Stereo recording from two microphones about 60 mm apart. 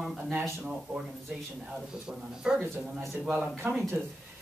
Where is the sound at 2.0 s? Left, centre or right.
Centre.